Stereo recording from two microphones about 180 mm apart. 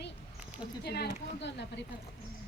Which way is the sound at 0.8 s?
65° left (ahead or behind).